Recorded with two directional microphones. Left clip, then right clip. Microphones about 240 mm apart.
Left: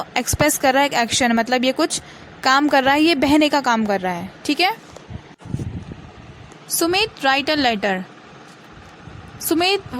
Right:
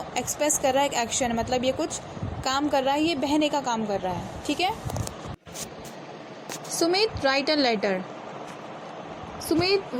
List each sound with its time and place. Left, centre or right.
0.1 s a woman's voice: left
6.7 s a woman's voice: left
9.5 s a woman's voice: left